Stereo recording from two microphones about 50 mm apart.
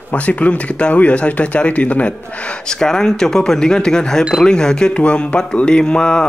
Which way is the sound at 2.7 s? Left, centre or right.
Centre.